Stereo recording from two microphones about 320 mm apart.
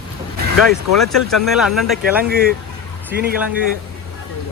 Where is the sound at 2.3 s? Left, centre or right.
Right.